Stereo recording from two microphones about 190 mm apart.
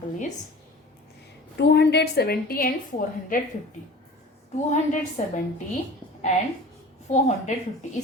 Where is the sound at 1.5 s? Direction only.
60° left (ahead or behind); by 3.5 s 45° left (ahead or behind).